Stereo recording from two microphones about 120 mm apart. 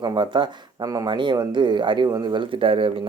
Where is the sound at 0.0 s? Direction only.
40° right (ahead or behind).